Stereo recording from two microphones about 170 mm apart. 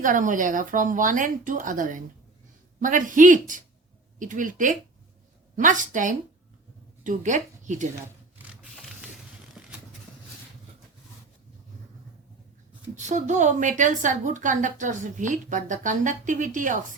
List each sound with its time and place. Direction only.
0.0 s a woman's voice: 50° right (ahead or behind)
13.0 s a woman's voice: 45° right (ahead or behind)